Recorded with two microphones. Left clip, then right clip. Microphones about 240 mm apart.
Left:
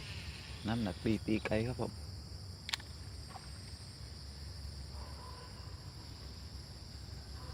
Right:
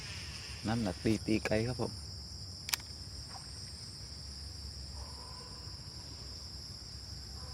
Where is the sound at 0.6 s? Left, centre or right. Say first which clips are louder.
Right 3 dB; right.